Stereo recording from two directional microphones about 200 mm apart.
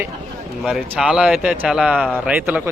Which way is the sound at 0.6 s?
Centre (ahead or behind).